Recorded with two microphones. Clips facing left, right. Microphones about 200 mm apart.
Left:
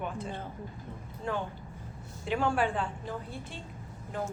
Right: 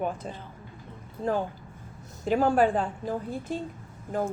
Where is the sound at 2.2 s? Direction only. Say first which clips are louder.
Right 7 dB; 40° right (ahead or behind).